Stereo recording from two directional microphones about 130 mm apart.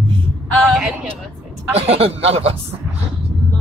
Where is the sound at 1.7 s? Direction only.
50° right (ahead or behind).